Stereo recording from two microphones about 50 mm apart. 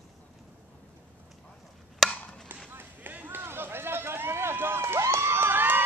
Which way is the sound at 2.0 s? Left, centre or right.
Centre.